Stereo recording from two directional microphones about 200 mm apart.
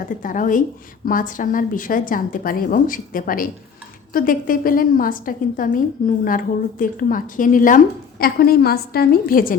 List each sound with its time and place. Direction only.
0.2 s a woman's voice: 40° left (ahead or behind)